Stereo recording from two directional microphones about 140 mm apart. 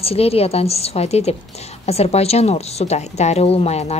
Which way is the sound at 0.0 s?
45° left (ahead or behind).